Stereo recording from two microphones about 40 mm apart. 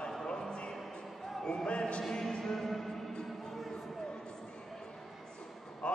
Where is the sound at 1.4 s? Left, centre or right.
Centre.